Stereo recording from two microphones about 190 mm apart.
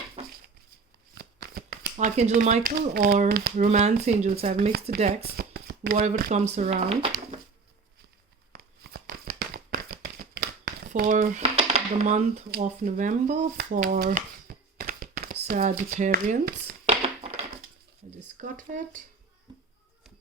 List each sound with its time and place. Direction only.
1.1 s shuffling cards: 55° right (ahead or behind)
3.0 s speech: 45° right (ahead or behind)
5.4 s speech: 50° right (ahead or behind); by 7.3 s 30° right (ahead or behind)
8.5 s tearing: 55° right (ahead or behind)
10.2 s crumpling: 50° right (ahead or behind)
11.4 s speech: 30° right (ahead or behind)
12.5 s speech: 45° right (ahead or behind)
13.6 s a sound: 45° right (ahead or behind)
15.4 s speech: 40° right (ahead or behind)
18.3 s speech: 45° right (ahead or behind)